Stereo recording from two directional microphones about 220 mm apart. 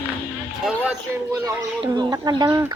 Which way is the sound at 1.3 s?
15° right (ahead or behind).